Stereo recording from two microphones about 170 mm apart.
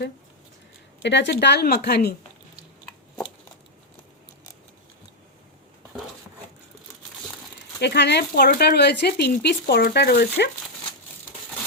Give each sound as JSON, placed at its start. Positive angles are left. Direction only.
{"t": 1.0, "sound": "speech", "side_deg": 90}
{"t": 7.8, "sound": "speech", "side_deg": 85}